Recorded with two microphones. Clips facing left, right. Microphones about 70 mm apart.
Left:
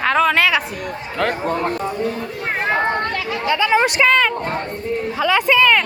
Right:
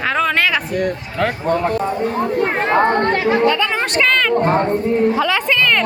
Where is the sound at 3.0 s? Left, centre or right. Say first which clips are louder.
Right 8 dB; right.